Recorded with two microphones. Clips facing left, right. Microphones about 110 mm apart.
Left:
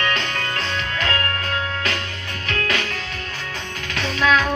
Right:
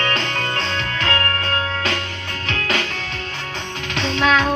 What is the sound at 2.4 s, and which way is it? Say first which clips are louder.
Music: right 1 dB; 25° right (ahead or behind).